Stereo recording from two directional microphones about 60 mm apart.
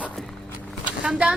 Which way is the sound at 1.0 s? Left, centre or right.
Centre.